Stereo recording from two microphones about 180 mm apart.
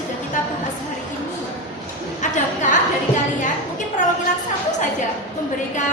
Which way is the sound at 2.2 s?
45° left (ahead or behind).